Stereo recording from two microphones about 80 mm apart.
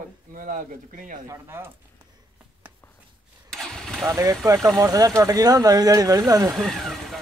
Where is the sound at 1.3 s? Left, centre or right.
Right.